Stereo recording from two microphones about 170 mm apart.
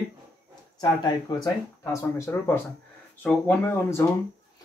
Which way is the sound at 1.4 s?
20° left (ahead or behind).